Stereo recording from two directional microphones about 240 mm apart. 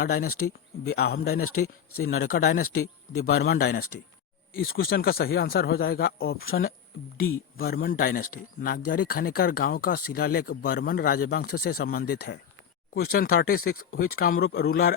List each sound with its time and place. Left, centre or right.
0.0 s speech: left
0.3 s speech: left
0.9 s speech: left
1.5 s speech: left
2.2 s speech: left
2.7 s speech: left
3.4 s speech: left